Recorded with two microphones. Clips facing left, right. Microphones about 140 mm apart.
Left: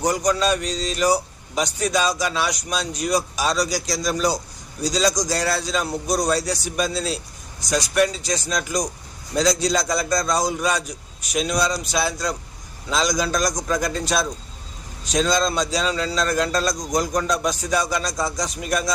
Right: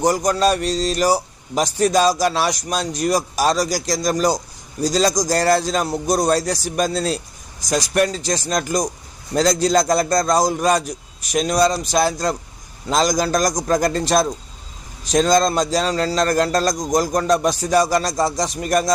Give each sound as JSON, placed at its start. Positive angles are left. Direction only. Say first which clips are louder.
{"t": 0.0, "sound": "a man's voice", "louder": "right 3 dB", "side_deg": -40}